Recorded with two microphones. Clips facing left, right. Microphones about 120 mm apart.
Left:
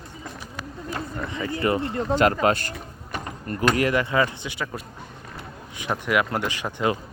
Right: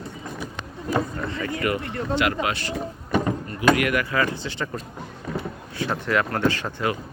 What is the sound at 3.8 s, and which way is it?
Speech, 30° left (ahead or behind).